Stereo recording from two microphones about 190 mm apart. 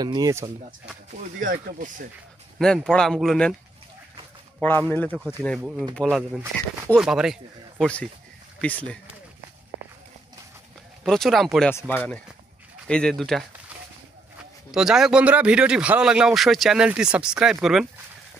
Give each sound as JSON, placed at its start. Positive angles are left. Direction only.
{"t": 0.0, "sound": "speech", "side_deg": -20}
{"t": 1.1, "sound": "speech", "side_deg": -45}
{"t": 2.6, "sound": "speech", "side_deg": 5}
{"t": 4.6, "sound": "speech", "side_deg": 10}
{"t": 5.6, "sound": "speech", "side_deg": -5}
{"t": 11.1, "sound": "speech", "side_deg": 0}
{"t": 14.7, "sound": "speech", "side_deg": -5}